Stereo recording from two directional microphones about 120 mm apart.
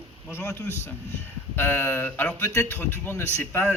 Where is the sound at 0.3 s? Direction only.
20° left (ahead or behind).